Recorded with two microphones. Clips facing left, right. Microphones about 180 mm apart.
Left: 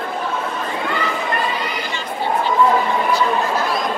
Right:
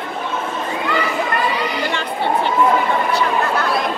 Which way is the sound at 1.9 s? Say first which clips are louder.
Right 2 dB; 65° right (ahead or behind).